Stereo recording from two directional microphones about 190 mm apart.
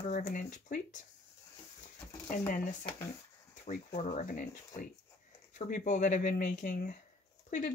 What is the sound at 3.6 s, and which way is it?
Speech, 50° left (ahead or behind).